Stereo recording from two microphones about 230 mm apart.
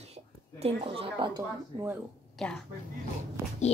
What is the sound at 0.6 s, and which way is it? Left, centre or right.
Speech, right.